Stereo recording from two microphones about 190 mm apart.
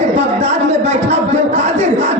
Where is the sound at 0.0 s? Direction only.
35° right (ahead or behind).